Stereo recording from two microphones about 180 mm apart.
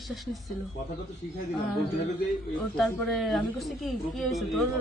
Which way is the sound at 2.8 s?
Centre (ahead or behind).